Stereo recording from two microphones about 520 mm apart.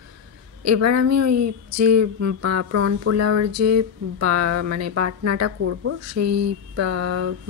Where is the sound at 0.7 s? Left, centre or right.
Right.